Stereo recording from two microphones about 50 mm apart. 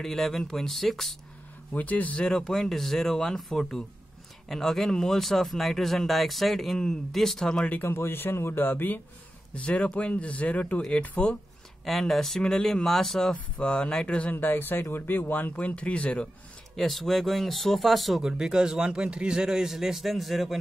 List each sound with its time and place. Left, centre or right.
0.0 s speech: centre
1.7 s speech: left
2.3 s speech: centre
7.8 s a man's voice: left
9.5 s speech: left
11.8 s speech: centre
13.3 s speech: left
14.3 s speech: left
16.7 s speech: centre
18.2 s a man's voice: centre